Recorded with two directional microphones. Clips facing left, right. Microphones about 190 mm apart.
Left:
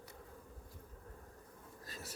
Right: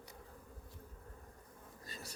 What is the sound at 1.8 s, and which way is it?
Insect, centre (ahead or behind).